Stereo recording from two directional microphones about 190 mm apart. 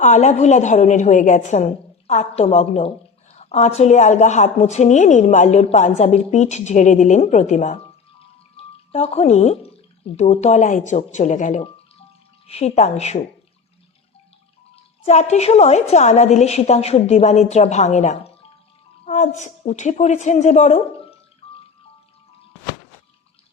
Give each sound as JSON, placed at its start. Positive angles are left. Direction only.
{"t": 0.0, "sound": "a woman's voice", "side_deg": 40}
{"t": 8.9, "sound": "a woman's voice", "side_deg": 30}
{"t": 15.0, "sound": "a woman's voice", "side_deg": 35}
{"t": 21.4, "sound": "music", "side_deg": 30}